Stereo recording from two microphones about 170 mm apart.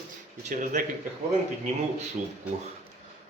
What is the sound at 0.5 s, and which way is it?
Speech, 50° right (ahead or behind).